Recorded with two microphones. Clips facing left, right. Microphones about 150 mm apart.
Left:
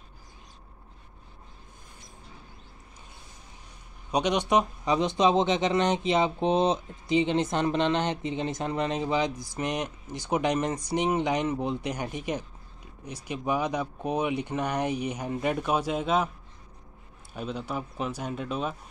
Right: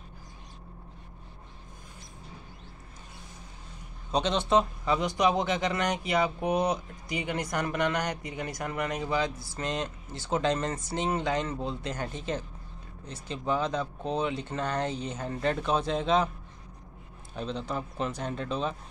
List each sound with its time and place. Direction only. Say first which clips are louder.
4.1 s speech: left 1 dB; 15° left (ahead or behind)
17.3 s speech: even; 5° left (ahead or behind)